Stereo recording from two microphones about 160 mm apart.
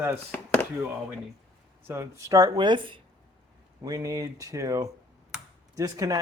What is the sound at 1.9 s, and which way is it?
Speech, 20° right (ahead or behind).